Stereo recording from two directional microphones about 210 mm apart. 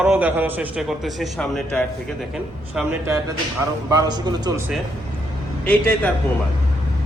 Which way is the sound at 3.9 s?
20° right (ahead or behind).